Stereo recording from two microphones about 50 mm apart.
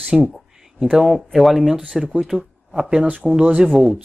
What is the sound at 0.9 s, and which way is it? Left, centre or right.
Speech, centre.